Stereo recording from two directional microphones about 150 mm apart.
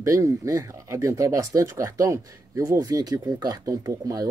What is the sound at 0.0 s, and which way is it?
Speech, 20° right (ahead or behind).